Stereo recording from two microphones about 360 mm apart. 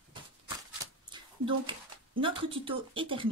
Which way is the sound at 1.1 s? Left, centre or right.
Centre.